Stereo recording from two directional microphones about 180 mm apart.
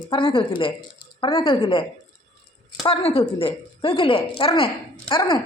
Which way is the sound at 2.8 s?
30° left (ahead or behind).